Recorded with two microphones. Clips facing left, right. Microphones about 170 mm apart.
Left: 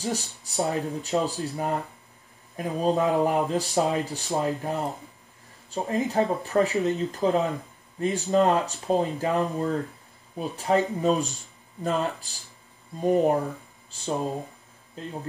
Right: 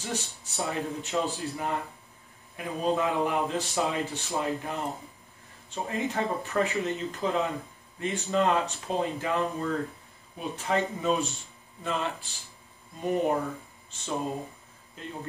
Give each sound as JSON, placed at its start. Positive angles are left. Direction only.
{"t": 0.0, "sound": "speech", "side_deg": 35}